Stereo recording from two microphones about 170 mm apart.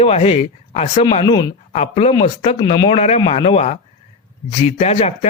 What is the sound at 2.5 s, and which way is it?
Speech, 25° left (ahead or behind).